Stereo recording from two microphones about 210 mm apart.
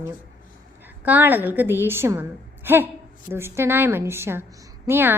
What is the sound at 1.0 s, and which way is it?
A woman's voice, 10° right (ahead or behind).